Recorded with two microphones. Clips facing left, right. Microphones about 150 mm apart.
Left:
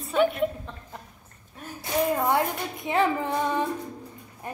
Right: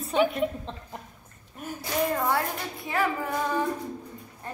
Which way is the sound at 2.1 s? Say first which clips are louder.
Left 3 dB; 20° left (ahead or behind).